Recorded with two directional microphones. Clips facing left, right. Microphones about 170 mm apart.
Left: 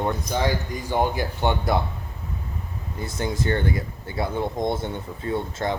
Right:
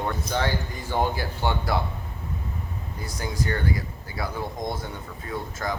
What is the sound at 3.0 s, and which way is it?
Speech, 25° left (ahead or behind).